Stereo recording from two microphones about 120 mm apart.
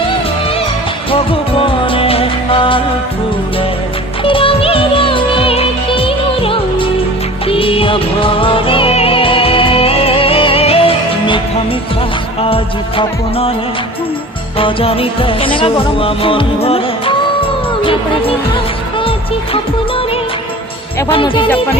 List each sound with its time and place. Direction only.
1.1 s music: 50° left (ahead or behind)
4.2 s music: 50° left (ahead or behind)
12.4 s music: 50° left (ahead or behind)
14.6 s music: 50° left (ahead or behind)
21.1 s music: 45° left (ahead or behind)